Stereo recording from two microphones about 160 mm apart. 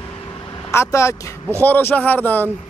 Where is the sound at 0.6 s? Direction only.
15° left (ahead or behind).